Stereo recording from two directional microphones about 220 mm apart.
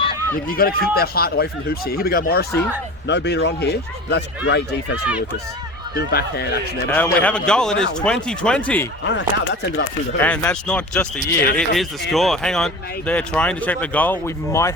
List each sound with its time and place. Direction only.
0.3 s speech: 40° left (ahead or behind)
6.0 s speech: 45° left (ahead or behind)
6.9 s speech: 5° left (ahead or behind)
9.0 s speech: 55° left (ahead or behind)
10.2 s speech: 5° left (ahead or behind)